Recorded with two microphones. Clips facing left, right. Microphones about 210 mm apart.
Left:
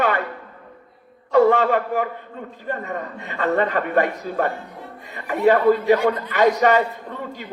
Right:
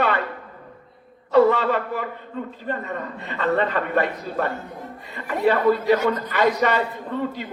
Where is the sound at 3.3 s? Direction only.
45° left (ahead or behind).